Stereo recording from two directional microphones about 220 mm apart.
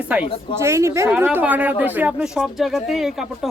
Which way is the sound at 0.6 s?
10° right (ahead or behind).